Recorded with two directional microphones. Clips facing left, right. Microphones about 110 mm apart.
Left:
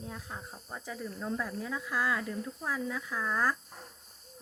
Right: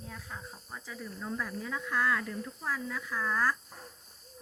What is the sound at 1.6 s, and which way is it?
Speech, 10° left (ahead or behind).